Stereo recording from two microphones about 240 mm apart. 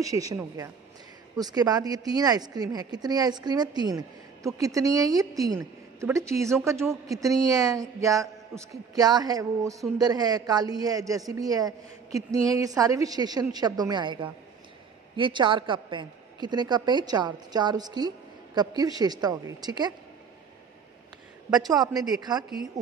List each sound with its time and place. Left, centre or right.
0.0 s speech: centre
21.5 s speech: centre